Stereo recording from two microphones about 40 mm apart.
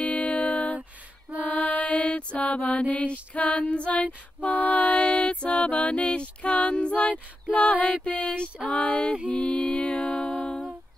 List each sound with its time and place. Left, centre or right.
0.0 s music: left
1.5 s mantra: left
2.3 s female singing: left
4.0 s female singing: left
8.6 s speech: left
9.3 s music: left